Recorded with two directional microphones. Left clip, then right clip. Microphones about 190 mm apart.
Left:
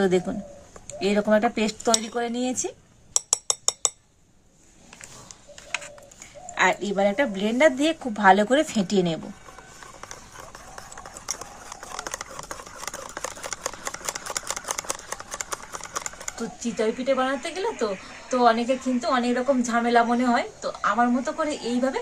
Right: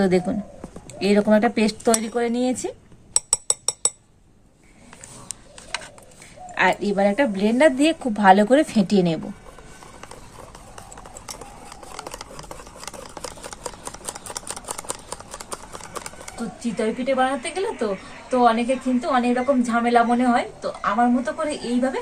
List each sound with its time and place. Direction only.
0.0 s a woman's voice: centre (ahead or behind)
6.5 s a woman's voice: 5° left (ahead or behind)
11.3 s a sound: 20° left (ahead or behind)
16.6 s a woman's voice: centre (ahead or behind)